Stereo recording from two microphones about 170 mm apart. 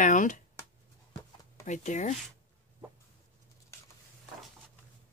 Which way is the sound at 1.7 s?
45° left (ahead or behind).